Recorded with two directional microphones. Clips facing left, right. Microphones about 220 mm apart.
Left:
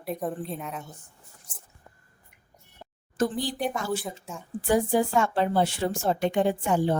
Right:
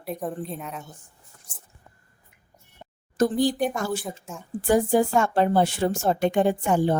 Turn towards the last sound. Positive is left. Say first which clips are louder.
# right 2 dB
turn(degrees=-50)  # may be behind; listen again after turning